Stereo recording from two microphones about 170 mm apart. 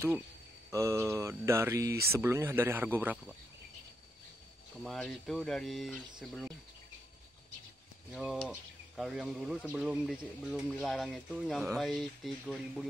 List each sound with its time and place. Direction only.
0.7 s mantra: 15° right (ahead or behind)
4.8 s speech: centre (ahead or behind)
8.1 s mantra: 10° right (ahead or behind)
8.9 s speech: centre (ahead or behind)